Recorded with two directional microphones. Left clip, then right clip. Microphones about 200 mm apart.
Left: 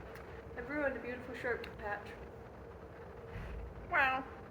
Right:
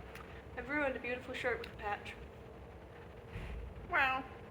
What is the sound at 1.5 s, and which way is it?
Speech, 25° right (ahead or behind).